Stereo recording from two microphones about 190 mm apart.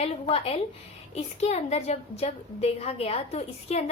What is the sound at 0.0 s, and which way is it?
A woman's voice, 30° left (ahead or behind).